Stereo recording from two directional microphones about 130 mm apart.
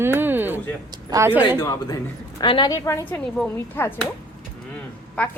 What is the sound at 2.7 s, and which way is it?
Speech, 25° left (ahead or behind).